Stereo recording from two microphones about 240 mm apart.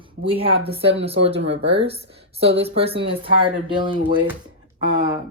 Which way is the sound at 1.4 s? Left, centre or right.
Right.